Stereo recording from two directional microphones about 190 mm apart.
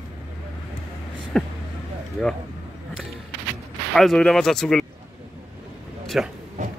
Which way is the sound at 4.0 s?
5° left (ahead or behind).